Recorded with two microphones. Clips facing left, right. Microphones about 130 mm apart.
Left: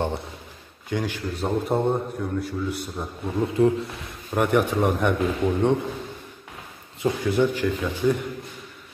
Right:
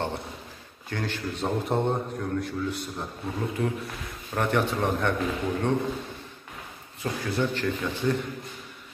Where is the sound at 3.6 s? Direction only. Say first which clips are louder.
Left 10 dB; 30° left (ahead or behind).